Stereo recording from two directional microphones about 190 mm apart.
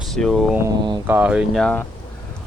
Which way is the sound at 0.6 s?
20° right (ahead or behind).